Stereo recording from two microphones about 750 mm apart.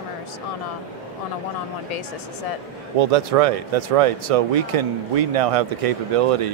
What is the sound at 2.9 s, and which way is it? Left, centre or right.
Speech, right.